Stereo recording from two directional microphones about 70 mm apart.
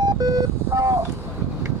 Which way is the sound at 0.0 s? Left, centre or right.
Right.